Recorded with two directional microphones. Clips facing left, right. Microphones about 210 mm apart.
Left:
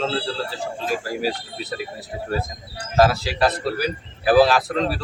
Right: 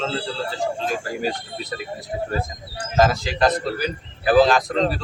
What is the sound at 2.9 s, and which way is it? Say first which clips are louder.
A man's voice: left 1 dB; 5° left (ahead or behind).